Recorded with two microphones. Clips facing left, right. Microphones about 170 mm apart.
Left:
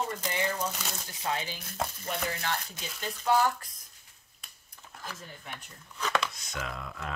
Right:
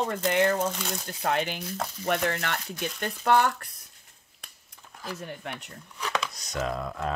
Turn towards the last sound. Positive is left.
turn(degrees=-40)  # may be behind; listen again after turning